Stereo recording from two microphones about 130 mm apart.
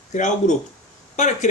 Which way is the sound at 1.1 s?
65° left (ahead or behind).